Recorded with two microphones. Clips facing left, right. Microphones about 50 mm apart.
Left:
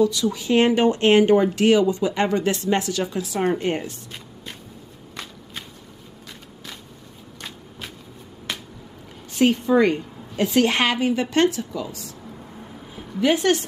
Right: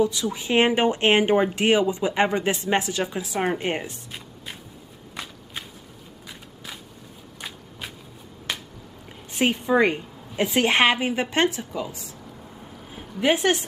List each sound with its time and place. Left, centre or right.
0.0 s speech: right
5.1 s shuffling cards: centre
8.5 s finger snapping: centre
9.3 s speech: right
13.2 s speech: right